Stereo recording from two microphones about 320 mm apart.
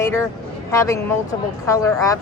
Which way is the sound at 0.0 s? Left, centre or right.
Centre.